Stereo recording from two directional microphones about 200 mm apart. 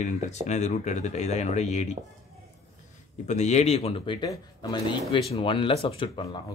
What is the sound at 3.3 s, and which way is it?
Speech, 35° left (ahead or behind).